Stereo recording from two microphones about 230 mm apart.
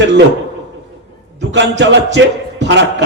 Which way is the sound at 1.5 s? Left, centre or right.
Right.